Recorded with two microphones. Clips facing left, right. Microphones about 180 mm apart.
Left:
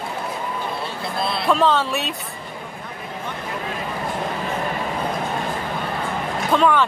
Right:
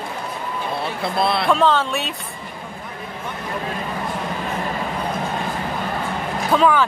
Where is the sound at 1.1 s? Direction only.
60° right (ahead or behind).